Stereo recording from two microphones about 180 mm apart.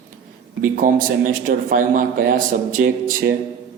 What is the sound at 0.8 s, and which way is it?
Speech, 50° right (ahead or behind).